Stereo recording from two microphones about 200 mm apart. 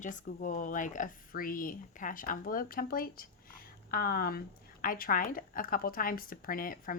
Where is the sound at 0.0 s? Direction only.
40° left (ahead or behind).